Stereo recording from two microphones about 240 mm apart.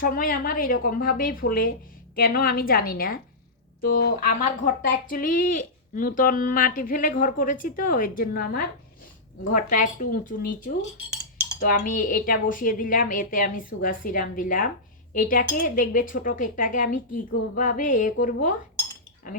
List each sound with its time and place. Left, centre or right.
0.0 s speech: left
11.6 s speech: left